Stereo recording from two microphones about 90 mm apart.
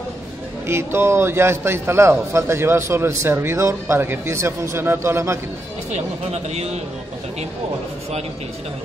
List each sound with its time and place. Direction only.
0.7 s a man's voice: 30° right (ahead or behind)